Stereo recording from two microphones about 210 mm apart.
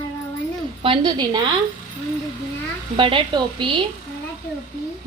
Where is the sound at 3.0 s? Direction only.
25° right (ahead or behind).